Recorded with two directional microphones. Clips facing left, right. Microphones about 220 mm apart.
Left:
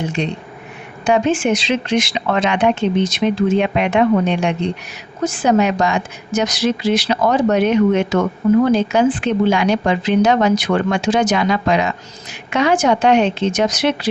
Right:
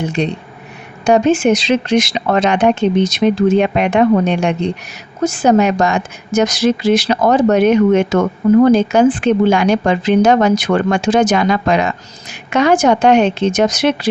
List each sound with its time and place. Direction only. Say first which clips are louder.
1.0 s a woman's voice: right 4 dB; 40° right (ahead or behind)